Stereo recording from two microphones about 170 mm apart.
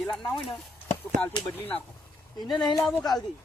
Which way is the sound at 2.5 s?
25° left (ahead or behind).